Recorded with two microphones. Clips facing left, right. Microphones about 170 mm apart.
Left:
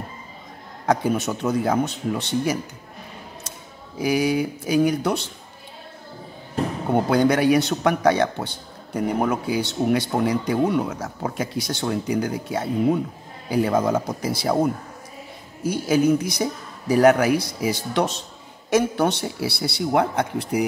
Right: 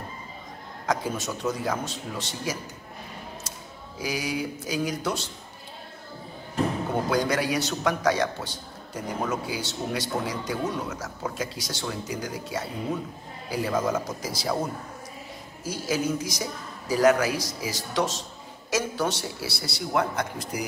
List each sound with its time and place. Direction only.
0.8 s a man's voice: 60° left (ahead or behind)
4.0 s a man's voice: 60° left (ahead or behind)
7.1 s a man's voice: 60° left (ahead or behind)
15.6 s a man's voice: 60° left (ahead or behind)